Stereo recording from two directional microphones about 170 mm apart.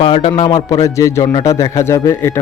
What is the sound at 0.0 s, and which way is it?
A man's voice, 30° left (ahead or behind).